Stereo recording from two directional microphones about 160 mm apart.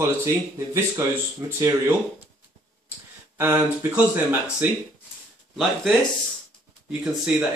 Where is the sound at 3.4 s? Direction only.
15° right (ahead or behind).